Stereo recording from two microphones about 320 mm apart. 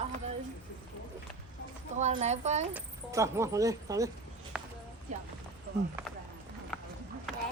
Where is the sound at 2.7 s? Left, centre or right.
Centre.